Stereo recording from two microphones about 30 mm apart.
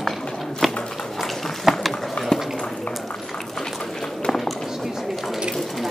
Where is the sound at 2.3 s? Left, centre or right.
Left.